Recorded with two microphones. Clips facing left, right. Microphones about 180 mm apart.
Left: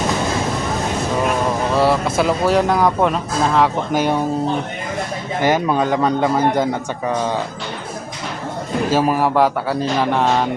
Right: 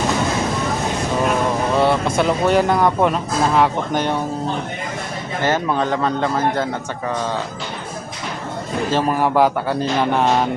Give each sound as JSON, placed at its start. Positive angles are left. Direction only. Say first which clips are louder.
{"t": 1.7, "sound": "speech", "louder": "left 1 dB", "side_deg": 0}
{"t": 5.4, "sound": "a man's voice", "louder": "left 2 dB", "side_deg": 15}
{"t": 8.9, "sound": "speech", "louder": "left 1 dB", "side_deg": 5}